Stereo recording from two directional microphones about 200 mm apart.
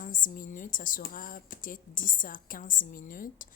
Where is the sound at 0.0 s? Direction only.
40° left (ahead or behind).